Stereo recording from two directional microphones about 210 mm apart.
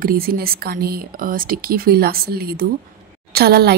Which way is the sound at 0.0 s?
45° right (ahead or behind).